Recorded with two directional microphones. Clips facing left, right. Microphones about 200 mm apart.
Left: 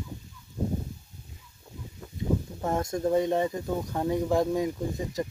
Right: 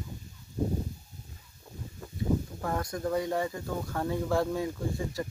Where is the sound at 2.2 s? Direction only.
20° left (ahead or behind).